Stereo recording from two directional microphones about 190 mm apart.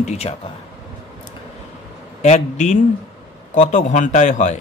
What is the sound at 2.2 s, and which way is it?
A man's voice, 40° left (ahead or behind).